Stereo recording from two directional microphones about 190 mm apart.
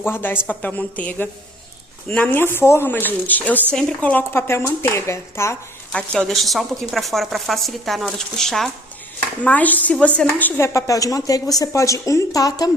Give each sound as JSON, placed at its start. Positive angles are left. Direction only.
{"t": 0.0, "sound": "speech", "side_deg": 10}
{"t": 6.0, "sound": "a woman's voice", "side_deg": 5}